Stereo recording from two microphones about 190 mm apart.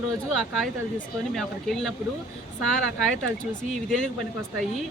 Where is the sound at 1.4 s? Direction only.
Centre (ahead or behind).